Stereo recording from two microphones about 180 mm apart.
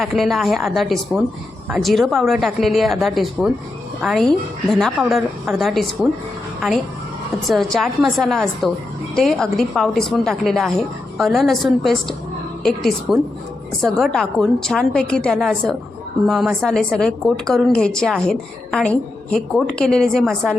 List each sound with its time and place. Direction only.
0.0 s a woman's voice: centre (ahead or behind)
7.4 s a woman's voice: centre (ahead or behind)